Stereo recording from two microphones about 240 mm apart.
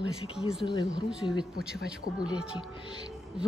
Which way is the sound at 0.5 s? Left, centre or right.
Centre.